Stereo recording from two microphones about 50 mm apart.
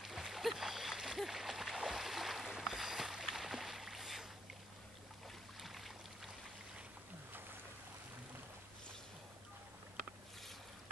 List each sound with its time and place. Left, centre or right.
0.0 s splash: centre
5.6 s boat: centre